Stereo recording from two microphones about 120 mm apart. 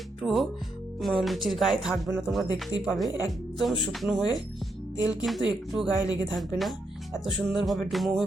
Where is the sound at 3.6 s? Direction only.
Centre (ahead or behind).